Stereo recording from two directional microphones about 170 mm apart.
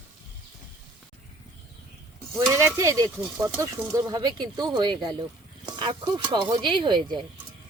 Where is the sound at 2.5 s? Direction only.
15° right (ahead or behind).